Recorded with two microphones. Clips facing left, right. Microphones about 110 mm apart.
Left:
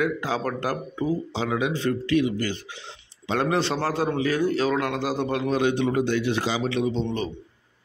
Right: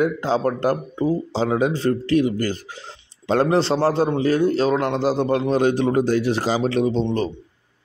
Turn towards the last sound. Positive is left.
turn(degrees=-35)  # may be behind; listen again after turning